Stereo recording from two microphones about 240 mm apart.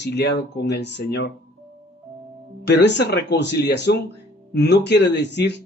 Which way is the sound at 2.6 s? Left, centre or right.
Left.